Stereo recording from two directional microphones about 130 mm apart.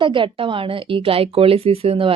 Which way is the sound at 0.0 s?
40° right (ahead or behind).